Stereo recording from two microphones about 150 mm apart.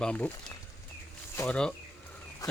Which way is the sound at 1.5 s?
5° left (ahead or behind).